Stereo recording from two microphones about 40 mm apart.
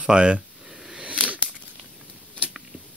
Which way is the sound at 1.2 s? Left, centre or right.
Right.